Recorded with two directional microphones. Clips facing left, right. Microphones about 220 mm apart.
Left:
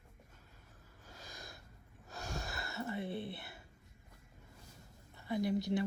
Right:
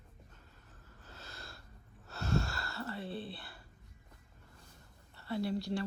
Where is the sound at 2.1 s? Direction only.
15° left (ahead or behind).